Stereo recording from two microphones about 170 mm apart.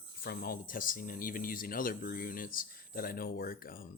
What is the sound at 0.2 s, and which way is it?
Speech, 60° left (ahead or behind).